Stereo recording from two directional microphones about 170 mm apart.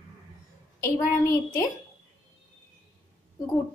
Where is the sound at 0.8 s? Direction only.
20° left (ahead or behind).